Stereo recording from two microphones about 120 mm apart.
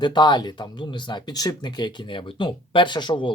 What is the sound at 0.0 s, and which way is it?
Speech, 40° left (ahead or behind).